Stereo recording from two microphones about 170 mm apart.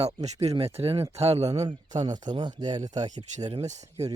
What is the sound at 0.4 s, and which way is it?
Speech, 35° right (ahead or behind).